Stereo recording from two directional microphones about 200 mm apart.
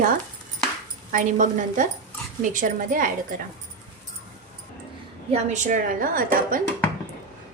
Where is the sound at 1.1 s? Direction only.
40° right (ahead or behind).